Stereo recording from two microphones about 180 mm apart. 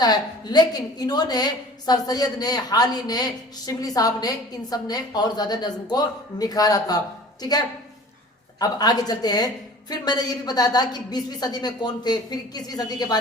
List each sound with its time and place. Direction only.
0.0 s a woman's voice: 20° left (ahead or behind)